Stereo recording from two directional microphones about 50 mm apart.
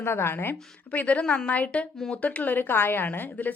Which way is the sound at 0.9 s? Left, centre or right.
Left.